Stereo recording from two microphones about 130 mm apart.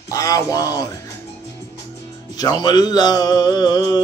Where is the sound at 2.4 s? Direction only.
30° left (ahead or behind).